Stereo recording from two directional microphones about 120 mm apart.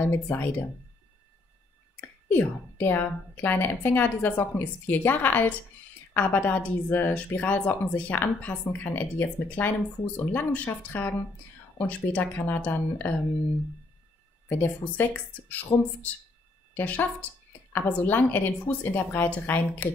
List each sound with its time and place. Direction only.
0.0 s a woman's voice: 15° left (ahead or behind)
2.0 s a woman's voice: 15° left (ahead or behind)
14.5 s a woman's voice: 15° left (ahead or behind)